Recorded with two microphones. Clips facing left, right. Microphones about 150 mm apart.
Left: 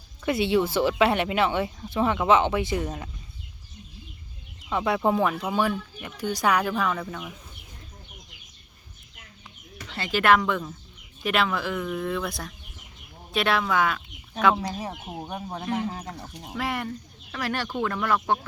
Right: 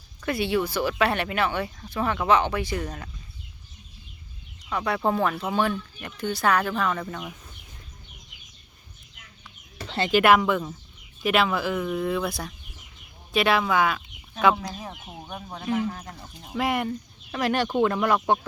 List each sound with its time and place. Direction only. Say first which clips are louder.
0.3 s speech: left 2 dB; 20° left (ahead or behind)
4.7 s speech: left 2 dB; 20° left (ahead or behind); by 7.2 s centre (ahead or behind)
9.7 s bird: right 7 dB; 30° right (ahead or behind)
10.1 s speech: right 2 dB; 15° right (ahead or behind)
15.2 s speech: left 2 dB; 30° left (ahead or behind)
16.6 s speech: right 4 dB; 15° right (ahead or behind)